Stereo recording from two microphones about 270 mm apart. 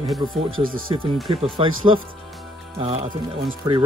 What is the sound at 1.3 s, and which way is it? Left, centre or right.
Speech, centre.